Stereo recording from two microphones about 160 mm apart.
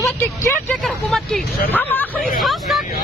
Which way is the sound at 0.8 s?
Centre (ahead or behind).